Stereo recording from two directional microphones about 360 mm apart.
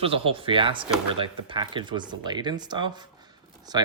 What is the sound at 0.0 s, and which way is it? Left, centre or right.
Speech, centre.